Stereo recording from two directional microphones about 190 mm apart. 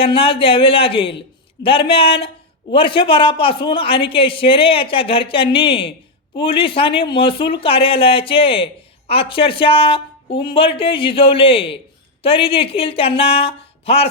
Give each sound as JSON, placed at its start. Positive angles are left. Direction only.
{"t": 0.0, "sound": "speech", "side_deg": 30}